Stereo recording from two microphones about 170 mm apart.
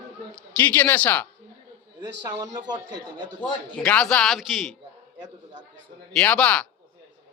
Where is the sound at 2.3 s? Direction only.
25° right (ahead or behind).